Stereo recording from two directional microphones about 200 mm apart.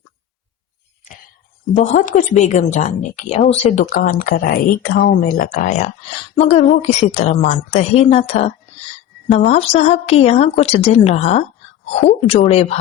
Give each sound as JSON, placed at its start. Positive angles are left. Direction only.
{"t": 1.7, "sound": "a woman's voice", "side_deg": 40}